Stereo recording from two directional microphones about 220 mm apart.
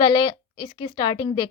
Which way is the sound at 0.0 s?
20° left (ahead or behind).